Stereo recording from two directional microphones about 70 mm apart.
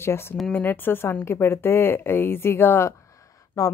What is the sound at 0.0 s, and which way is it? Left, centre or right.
Speech, left.